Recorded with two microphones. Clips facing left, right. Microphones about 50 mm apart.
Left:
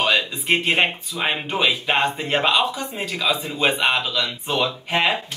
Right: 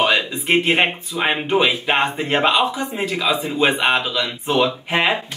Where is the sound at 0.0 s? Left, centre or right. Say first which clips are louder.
Right 2 dB; centre.